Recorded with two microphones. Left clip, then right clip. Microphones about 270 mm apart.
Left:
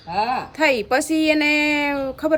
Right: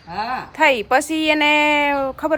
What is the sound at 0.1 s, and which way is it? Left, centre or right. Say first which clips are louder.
Speech: left 3 dB; right.